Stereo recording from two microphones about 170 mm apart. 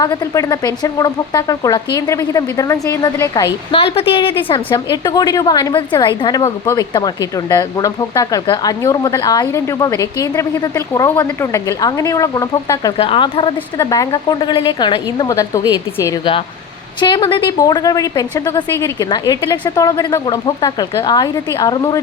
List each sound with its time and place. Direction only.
0.0 s a woman's voice: 20° left (ahead or behind)
3.7 s a woman's voice: 35° left (ahead or behind)
13.0 s a woman's voice: 30° left (ahead or behind)
17.0 s a woman's voice: 25° left (ahead or behind)